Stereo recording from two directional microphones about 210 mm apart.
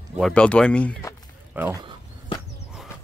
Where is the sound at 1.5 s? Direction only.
10° right (ahead or behind).